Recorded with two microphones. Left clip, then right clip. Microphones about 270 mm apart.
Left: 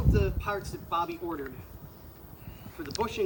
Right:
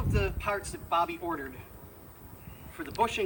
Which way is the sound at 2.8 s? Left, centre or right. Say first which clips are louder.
Right 4 dB; centre.